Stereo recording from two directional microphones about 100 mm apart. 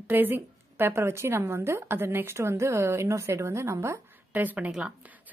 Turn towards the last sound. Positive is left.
turn(degrees=-5)  # may be behind; listen again after turning